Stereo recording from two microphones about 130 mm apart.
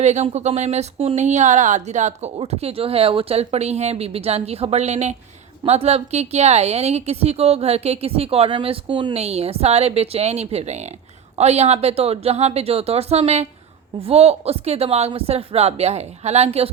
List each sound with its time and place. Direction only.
0.0 s a woman's voice: 60° right (ahead or behind); by 9.1 s 40° right (ahead or behind)
9.1 s a woman's voice: 55° right (ahead or behind)